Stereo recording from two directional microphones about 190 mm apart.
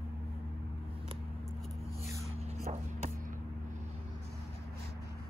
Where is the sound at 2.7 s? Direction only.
40° right (ahead or behind).